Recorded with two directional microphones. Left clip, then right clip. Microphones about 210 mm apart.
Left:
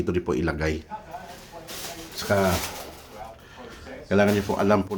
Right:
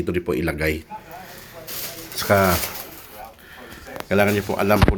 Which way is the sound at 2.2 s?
20° right (ahead or behind).